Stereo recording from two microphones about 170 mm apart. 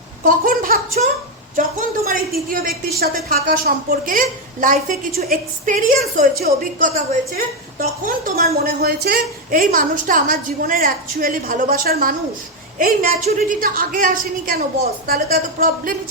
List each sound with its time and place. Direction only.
0.3 s a woman's voice: 55° right (ahead or behind)